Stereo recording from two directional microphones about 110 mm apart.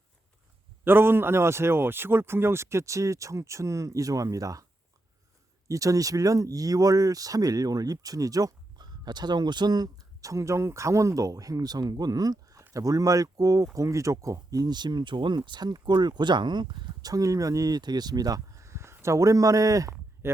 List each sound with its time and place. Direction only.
0.9 s speech: 20° right (ahead or behind)
5.6 s speech: 30° right (ahead or behind)